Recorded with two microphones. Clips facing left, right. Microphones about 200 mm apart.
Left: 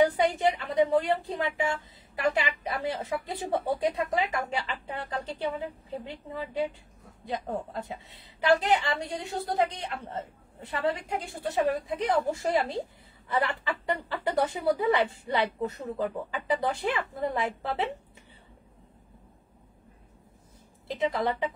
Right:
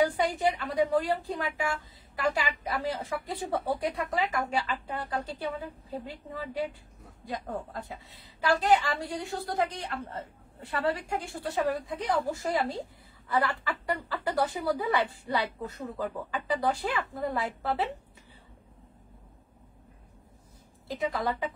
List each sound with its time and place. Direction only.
0.0 s a woman's voice: 25° left (ahead or behind)
20.9 s a woman's voice: 25° left (ahead or behind)